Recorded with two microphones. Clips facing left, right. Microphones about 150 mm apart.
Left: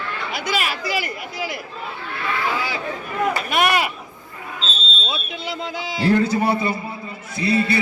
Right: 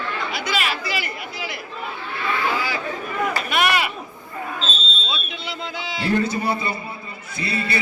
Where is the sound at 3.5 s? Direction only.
45° left (ahead or behind).